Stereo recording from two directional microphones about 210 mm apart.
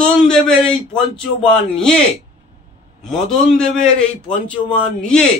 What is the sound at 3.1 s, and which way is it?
A man's voice, centre (ahead or behind).